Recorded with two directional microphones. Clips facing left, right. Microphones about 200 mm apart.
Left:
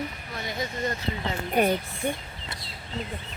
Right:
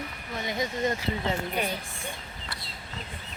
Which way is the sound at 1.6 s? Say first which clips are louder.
Left 8 dB; 50° left (ahead or behind).